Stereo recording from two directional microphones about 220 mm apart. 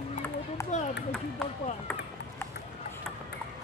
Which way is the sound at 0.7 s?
30° left (ahead or behind).